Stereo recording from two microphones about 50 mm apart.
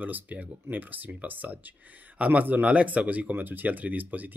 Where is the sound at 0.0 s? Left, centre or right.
Right.